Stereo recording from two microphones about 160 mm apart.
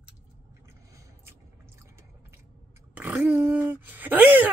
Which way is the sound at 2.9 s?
10° right (ahead or behind).